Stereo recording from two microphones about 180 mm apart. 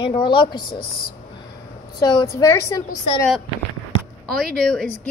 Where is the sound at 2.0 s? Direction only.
20° left (ahead or behind).